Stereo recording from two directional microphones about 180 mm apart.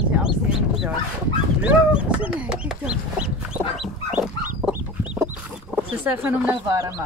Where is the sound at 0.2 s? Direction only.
5° right (ahead or behind).